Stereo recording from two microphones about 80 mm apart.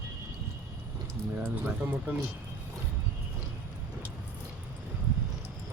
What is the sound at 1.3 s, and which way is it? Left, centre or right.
Speech, right.